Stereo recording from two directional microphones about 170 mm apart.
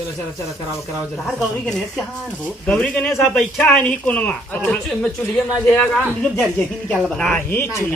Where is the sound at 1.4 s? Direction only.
Centre (ahead or behind).